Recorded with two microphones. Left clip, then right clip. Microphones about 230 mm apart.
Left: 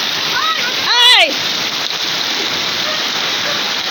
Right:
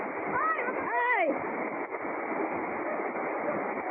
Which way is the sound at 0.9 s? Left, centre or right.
Left.